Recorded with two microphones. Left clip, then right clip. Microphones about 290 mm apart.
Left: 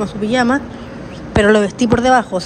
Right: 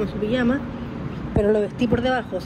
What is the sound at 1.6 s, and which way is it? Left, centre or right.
Speech, left.